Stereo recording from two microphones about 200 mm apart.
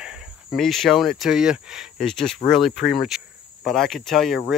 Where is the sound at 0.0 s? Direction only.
5° right (ahead or behind).